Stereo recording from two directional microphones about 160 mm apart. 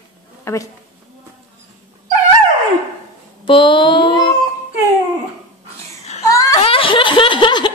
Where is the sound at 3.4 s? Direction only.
30° left (ahead or behind).